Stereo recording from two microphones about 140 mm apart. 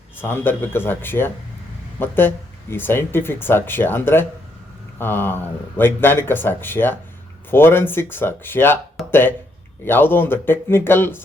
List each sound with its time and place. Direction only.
0.2 s speech: 15° left (ahead or behind)